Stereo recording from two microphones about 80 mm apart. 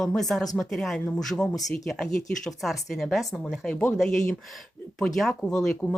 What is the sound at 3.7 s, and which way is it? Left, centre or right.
Speech, left.